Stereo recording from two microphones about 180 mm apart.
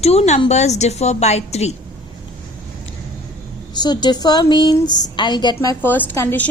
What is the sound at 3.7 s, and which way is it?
A woman's voice, 25° left (ahead or behind).